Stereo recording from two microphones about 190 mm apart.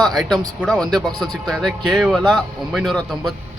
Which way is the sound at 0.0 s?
Centre (ahead or behind).